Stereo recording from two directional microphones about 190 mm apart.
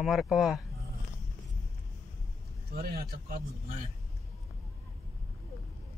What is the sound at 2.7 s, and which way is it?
A man's voice, 55° right (ahead or behind).